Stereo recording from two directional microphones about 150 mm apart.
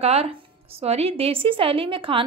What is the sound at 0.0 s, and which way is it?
A woman's voice, 45° right (ahead or behind).